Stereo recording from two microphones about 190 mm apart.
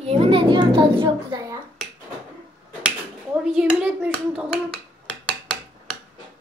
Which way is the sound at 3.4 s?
5° right (ahead or behind).